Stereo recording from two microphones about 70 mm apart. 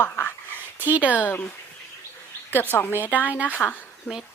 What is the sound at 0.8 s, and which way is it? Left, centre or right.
Speech, right.